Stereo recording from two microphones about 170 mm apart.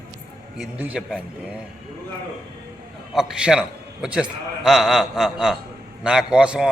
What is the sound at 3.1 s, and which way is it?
A man's voice, 5° right (ahead or behind).